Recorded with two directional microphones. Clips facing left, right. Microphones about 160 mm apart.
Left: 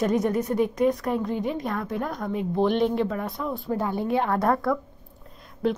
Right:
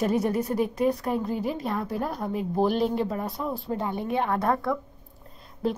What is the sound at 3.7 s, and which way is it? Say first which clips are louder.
A woman's voice: left 5 dB; 20° right (ahead or behind).